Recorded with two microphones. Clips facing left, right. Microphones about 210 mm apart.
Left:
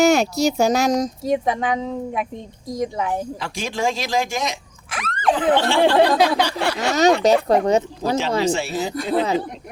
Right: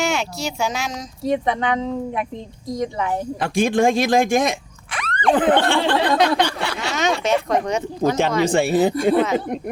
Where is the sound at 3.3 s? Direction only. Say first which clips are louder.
Right 9 dB; 55° right (ahead or behind).